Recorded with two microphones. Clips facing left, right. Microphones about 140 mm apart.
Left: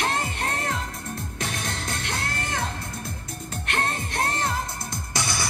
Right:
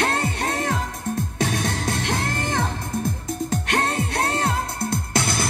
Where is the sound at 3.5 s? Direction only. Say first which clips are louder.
Right 4 dB; 85° right; by 5.3 s 60° right (ahead or behind).